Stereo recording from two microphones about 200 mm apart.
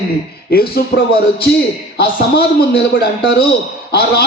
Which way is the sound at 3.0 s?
55° left (ahead or behind).